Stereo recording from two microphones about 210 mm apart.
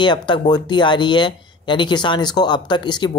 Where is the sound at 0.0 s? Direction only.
20° left (ahead or behind).